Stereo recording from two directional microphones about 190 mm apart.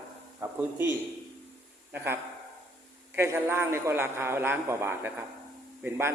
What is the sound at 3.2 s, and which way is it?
A man's voice, 10° right (ahead or behind).